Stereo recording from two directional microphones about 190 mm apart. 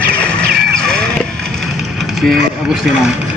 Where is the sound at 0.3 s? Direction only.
5° left (ahead or behind).